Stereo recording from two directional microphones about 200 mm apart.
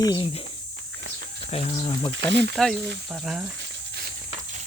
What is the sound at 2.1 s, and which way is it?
Speech, 60° right (ahead or behind).